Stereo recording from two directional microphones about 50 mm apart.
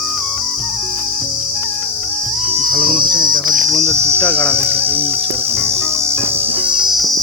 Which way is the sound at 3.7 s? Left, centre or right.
Centre.